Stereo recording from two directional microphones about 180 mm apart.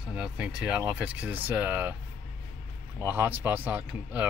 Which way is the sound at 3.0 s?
10° right (ahead or behind).